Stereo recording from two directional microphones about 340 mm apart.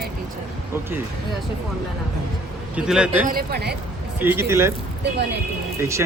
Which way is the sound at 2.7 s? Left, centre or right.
Centre.